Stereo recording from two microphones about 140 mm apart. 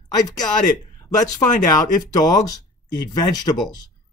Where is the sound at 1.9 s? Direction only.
25° left (ahead or behind).